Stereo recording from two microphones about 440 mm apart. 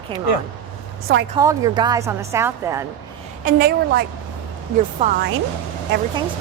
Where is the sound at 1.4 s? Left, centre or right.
Centre.